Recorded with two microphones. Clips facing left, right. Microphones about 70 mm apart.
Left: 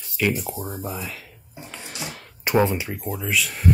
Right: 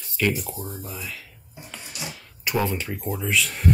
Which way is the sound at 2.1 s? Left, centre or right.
Left.